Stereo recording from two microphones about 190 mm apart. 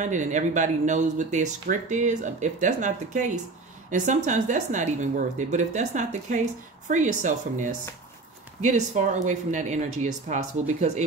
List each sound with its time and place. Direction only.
0.0 s speech: 40° right (ahead or behind)